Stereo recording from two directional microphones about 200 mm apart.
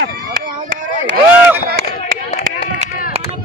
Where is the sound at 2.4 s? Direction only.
35° right (ahead or behind).